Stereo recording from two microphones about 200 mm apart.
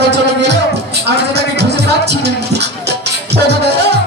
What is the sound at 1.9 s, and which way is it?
Music, 55° right (ahead or behind).